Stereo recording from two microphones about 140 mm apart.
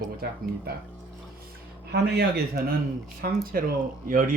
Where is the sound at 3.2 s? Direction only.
90° right.